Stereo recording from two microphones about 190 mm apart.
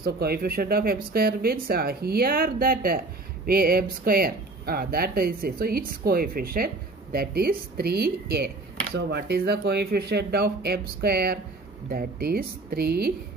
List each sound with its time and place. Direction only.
0.0 s speech: 55° right (ahead or behind)